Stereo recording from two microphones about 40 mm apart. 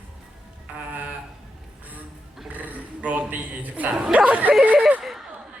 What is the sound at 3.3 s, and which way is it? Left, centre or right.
A man's voice, right.